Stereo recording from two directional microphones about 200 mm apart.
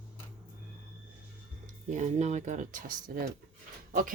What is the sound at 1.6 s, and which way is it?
Speech, 40° right (ahead or behind).